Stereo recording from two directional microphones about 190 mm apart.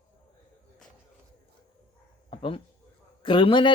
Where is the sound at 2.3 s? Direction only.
30° left (ahead or behind).